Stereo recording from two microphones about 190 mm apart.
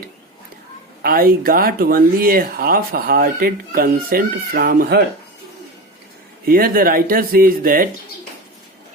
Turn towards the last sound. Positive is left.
turn(degrees=-50)  # may be behind; listen again after turning